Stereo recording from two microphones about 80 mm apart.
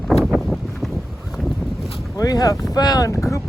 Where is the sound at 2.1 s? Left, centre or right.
Left.